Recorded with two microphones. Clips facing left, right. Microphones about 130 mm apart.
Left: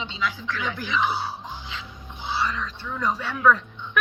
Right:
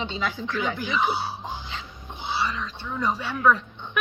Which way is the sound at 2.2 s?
10° right (ahead or behind).